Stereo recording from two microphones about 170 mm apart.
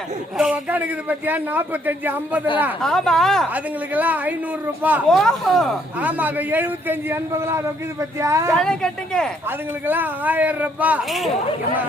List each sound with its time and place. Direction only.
0.3 s speech: 5° right (ahead or behind)
2.8 s speech: 5° left (ahead or behind)
3.5 s speech: 10° right (ahead or behind)
5.0 s speech: centre (ahead or behind); by 8.5 s 15° right (ahead or behind)
8.5 s speech: 5° left (ahead or behind)
9.8 s speech: 10° right (ahead or behind)